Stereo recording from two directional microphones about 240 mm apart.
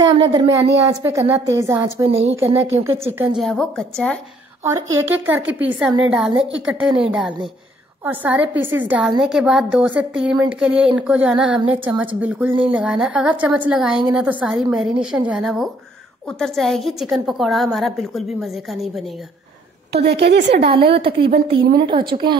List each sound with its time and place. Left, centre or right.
0.2 s speech: centre
3.3 s a woman's voice: centre
5.0 s a woman's voice: centre
19.9 s a woman's voice: right
20.7 s a woman's voice: right